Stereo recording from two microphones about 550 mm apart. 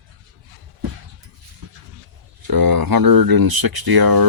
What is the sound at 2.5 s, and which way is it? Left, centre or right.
Speech, right.